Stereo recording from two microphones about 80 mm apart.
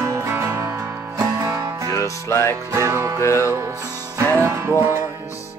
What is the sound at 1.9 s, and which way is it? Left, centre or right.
Music, left.